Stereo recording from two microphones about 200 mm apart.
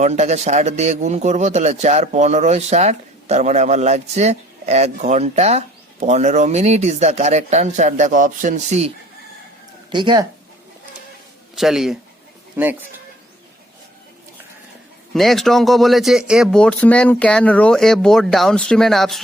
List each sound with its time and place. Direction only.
0.0 s a man's voice: 35° right (ahead or behind)
9.9 s speech: 25° right (ahead or behind)
11.5 s speech: centre (ahead or behind)
15.1 s speech: centre (ahead or behind)